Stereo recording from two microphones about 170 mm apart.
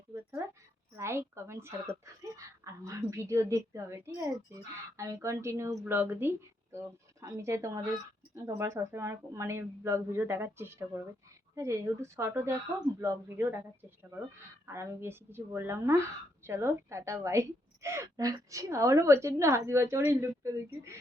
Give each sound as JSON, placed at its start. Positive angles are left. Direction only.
{"t": 0.1, "sound": "speech", "side_deg": -15}
{"t": 14.7, "sound": "speech", "side_deg": -15}